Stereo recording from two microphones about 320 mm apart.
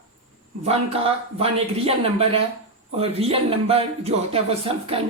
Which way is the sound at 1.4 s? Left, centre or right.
Centre.